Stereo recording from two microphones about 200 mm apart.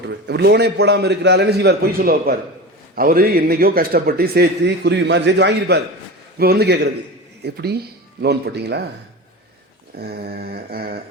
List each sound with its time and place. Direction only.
0.1 s a man's voice: 55° right (ahead or behind)
9.9 s speech: 50° right (ahead or behind)